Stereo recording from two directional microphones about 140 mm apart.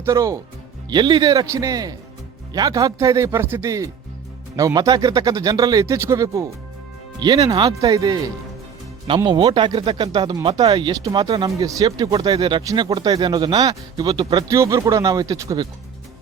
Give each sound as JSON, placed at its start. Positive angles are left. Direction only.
{"t": 0.0, "sound": "speech", "side_deg": -20}